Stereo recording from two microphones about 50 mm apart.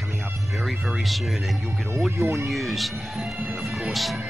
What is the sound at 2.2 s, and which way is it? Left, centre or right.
Speech, right.